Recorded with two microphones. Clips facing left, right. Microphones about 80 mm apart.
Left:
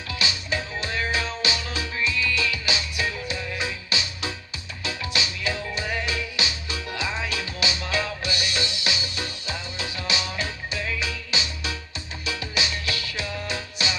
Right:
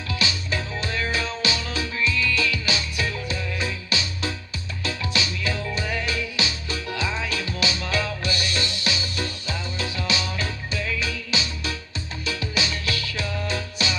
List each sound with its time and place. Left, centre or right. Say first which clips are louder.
0.1 s music: right 1 dB; left